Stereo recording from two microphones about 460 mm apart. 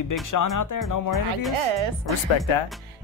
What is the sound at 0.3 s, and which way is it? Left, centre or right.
Speech, left.